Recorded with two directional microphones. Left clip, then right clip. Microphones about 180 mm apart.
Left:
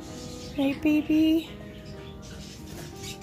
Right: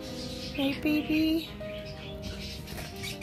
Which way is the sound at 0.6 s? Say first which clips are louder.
Left 4 dB; 45° left (ahead or behind).